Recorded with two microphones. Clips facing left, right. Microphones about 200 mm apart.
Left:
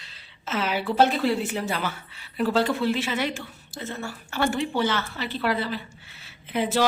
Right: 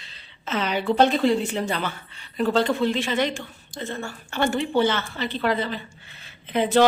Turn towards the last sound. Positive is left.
turn(degrees=5)  # may be behind; listen again after turning